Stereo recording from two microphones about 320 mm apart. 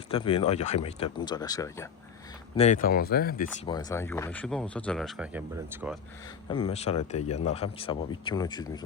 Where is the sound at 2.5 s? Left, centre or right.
Left.